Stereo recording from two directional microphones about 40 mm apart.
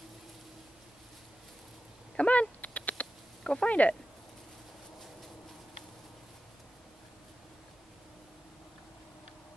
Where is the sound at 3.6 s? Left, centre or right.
Left.